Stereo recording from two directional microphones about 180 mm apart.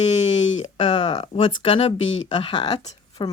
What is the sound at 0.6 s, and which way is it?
Speech, 40° left (ahead or behind).